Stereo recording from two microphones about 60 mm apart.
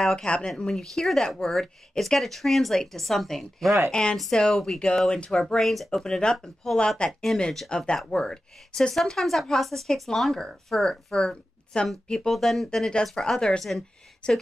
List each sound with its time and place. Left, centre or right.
0.2 s speech: centre
14.2 s speech: centre